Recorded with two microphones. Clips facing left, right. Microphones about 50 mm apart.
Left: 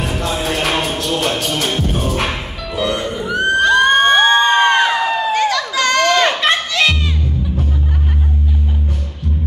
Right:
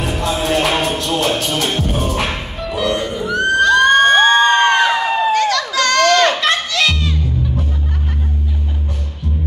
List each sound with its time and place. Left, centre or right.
0.0 s music: centre
3.3 s crowd: centre
6.4 s children playing: left